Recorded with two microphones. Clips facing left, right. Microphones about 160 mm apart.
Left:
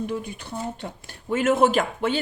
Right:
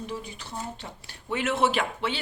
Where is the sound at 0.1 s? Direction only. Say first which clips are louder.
Left 6 dB; 55° left (ahead or behind).